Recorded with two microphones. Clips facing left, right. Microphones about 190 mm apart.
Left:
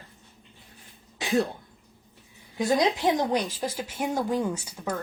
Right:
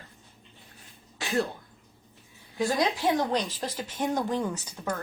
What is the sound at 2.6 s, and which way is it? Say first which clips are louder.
Speech: left 3 dB; 20° left (ahead or behind).